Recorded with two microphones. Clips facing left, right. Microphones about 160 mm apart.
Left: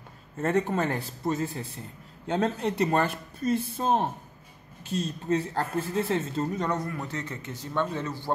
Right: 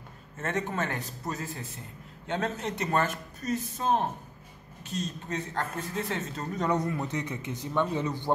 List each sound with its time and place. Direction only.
0.4 s speech: 35° left (ahead or behind)
6.7 s a man's voice: 20° right (ahead or behind)